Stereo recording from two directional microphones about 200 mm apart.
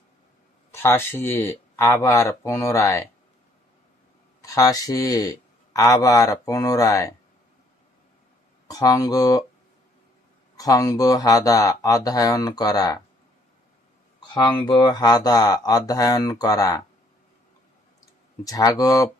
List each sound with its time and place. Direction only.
0.7 s a man's voice: 10° left (ahead or behind)
4.4 s a man's voice: 15° left (ahead or behind)
8.6 s speech: 20° left (ahead or behind)
10.6 s a man's voice: 15° left (ahead or behind)
14.2 s speech: 25° left (ahead or behind)
18.4 s a man's voice: 20° left (ahead or behind)